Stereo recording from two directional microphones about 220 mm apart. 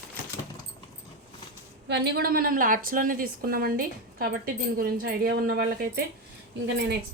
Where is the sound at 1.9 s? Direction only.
50° right (ahead or behind).